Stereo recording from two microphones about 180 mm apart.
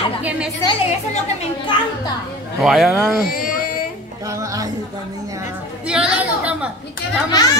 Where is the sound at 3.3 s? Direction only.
55° left (ahead or behind).